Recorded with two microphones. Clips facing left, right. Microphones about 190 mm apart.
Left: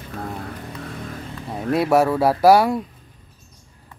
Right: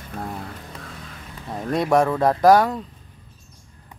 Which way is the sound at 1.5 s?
5° left (ahead or behind).